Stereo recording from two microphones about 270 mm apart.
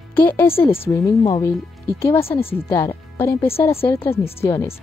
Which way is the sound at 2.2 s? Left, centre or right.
Left.